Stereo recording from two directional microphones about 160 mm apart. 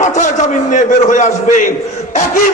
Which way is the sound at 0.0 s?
50° left (ahead or behind).